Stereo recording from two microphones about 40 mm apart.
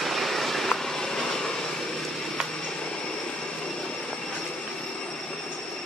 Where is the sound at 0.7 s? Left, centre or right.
Centre.